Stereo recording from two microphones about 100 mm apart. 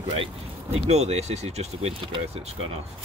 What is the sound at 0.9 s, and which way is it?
Speech, 90° right.